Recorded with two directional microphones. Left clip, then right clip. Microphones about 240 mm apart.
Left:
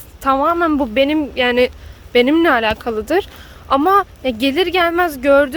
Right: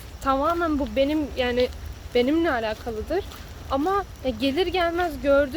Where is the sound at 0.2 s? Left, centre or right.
Left.